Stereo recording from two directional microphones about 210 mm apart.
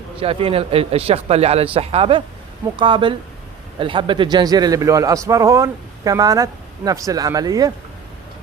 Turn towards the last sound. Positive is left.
turn(degrees=-15)  # may be behind; listen again after turning